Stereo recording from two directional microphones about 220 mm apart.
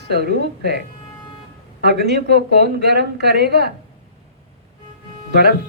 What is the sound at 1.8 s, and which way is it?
Speech, 50° right (ahead or behind).